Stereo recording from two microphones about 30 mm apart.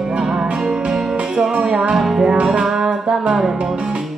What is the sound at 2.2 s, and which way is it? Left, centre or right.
Music, right.